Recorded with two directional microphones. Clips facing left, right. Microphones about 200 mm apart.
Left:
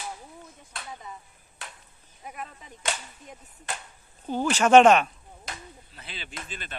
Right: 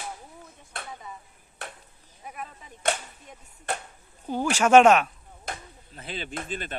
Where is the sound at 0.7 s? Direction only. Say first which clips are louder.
Right 1 dB; 60° right (ahead or behind).